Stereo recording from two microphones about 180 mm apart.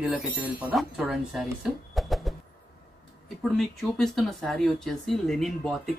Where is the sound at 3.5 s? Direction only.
Centre (ahead or behind).